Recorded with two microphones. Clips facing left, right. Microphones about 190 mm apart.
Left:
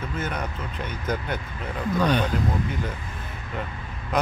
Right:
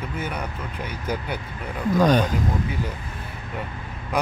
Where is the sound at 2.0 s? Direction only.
45° right (ahead or behind).